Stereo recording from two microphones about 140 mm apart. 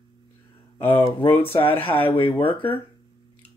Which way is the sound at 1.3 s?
40° left (ahead or behind).